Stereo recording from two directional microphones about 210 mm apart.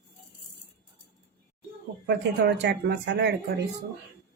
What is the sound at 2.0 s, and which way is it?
A woman's voice, 55° right (ahead or behind).